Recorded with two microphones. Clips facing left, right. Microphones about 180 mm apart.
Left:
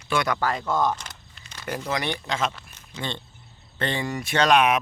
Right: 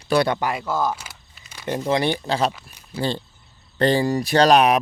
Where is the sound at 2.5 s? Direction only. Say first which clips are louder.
Right 5 dB; 10° right (ahead or behind).